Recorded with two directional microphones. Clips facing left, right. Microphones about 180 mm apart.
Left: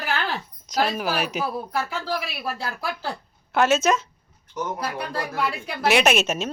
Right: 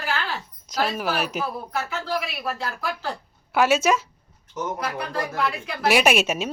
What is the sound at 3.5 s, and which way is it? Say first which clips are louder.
Speech: even; 10° right (ahead or behind).